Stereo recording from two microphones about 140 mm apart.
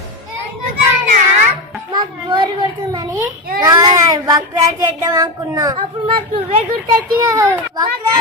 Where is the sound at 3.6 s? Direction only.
25° right (ahead or behind).